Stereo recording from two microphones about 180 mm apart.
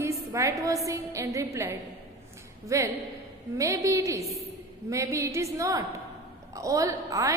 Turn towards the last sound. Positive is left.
turn(degrees=-20)  # may be behind; listen again after turning